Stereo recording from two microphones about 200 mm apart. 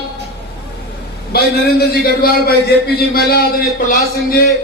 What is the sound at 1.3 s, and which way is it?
Speech, 50° left (ahead or behind).